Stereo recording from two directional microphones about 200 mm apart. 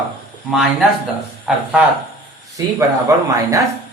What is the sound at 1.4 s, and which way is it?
Speech, 5° right (ahead or behind).